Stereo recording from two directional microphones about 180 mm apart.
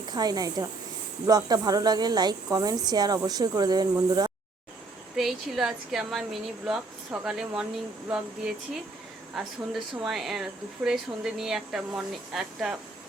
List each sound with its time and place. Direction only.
0.1 s a woman's voice: 20° right (ahead or behind)
5.1 s speech: centre (ahead or behind)
9.3 s speech: centre (ahead or behind)